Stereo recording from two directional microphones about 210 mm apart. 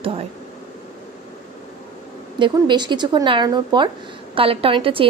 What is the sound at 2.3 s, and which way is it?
A woman's voice, 20° right (ahead or behind).